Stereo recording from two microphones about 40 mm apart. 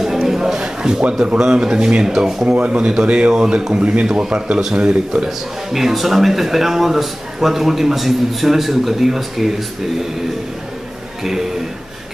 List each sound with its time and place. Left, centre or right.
0.0 s a sound: centre
1.5 s a man's voice: right
2.4 s speech: right
5.7 s a man's voice: centre